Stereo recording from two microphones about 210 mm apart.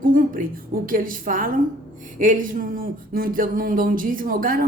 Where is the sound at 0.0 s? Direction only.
40° right (ahead or behind).